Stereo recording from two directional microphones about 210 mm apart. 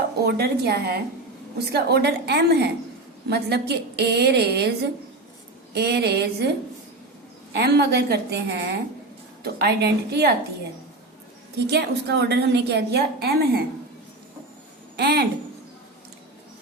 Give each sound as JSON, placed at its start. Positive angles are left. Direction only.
{"t": 0.3, "sound": "a woman's voice", "side_deg": -50}
{"t": 7.5, "sound": "a woman's voice", "side_deg": -50}
{"t": 11.5, "sound": "a woman's voice", "side_deg": -50}
{"t": 14.9, "sound": "speech", "side_deg": -50}